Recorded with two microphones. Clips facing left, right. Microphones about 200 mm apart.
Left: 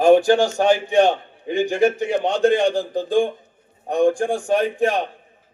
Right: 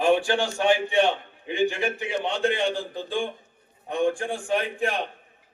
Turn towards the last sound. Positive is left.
turn(degrees=40)  # may be behind; listen again after turning